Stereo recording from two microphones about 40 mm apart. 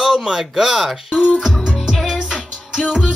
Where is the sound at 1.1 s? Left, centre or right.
Left.